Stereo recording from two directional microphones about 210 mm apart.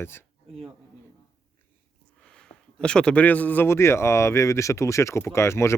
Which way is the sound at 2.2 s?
5° left (ahead or behind).